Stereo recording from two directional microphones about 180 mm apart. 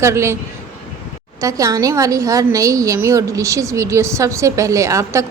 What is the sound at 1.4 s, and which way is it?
A woman's voice, 20° right (ahead or behind).